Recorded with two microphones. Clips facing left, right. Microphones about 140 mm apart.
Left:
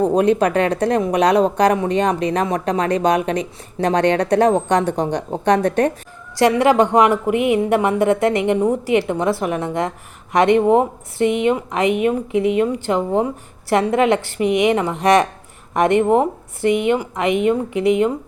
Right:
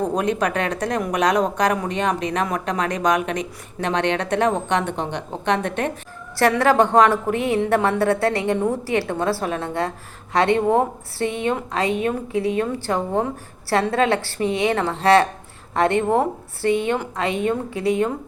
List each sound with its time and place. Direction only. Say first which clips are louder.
0.0 s a woman's voice: left 6 dB; 35° left (ahead or behind)
6.6 s a woman's voice: left 1 dB; 15° left (ahead or behind)